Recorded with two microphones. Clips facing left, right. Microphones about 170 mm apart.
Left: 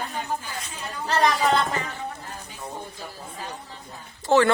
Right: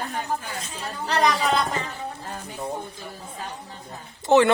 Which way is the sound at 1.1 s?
Centre (ahead or behind).